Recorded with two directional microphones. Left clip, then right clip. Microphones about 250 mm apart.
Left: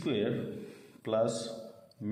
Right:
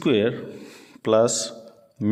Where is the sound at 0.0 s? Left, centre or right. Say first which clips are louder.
Right 11 dB; right.